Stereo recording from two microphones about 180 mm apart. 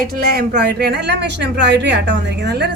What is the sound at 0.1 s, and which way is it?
A woman's voice, 60° right (ahead or behind).